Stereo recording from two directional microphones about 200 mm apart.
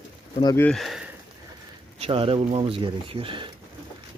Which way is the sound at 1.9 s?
30° right (ahead or behind).